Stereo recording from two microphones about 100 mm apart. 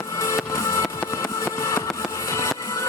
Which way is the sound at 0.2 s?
30° left (ahead or behind).